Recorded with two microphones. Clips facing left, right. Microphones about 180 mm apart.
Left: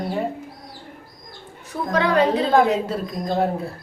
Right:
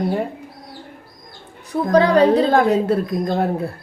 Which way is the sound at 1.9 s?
35° right (ahead or behind).